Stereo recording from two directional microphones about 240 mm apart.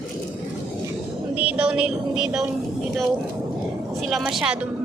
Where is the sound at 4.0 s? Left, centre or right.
Centre.